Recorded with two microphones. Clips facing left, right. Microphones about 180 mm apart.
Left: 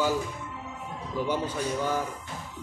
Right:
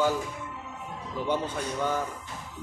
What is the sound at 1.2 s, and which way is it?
Speech, 5° left (ahead or behind).